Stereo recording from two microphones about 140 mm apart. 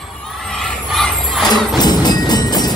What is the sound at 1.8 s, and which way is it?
Music, 30° left (ahead or behind).